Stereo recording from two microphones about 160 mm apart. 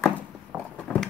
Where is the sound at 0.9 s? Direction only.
5° right (ahead or behind).